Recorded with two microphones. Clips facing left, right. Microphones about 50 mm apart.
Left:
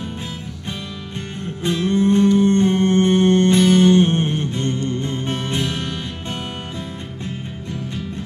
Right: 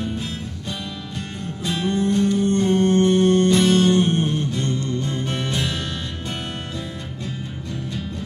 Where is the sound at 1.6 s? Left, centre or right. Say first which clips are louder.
Left 4 dB; left.